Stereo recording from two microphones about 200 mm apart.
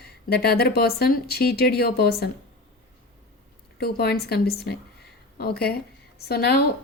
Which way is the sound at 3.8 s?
50° left (ahead or behind).